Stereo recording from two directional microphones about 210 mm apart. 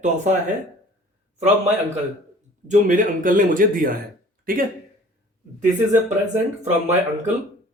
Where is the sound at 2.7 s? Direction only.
40° right (ahead or behind).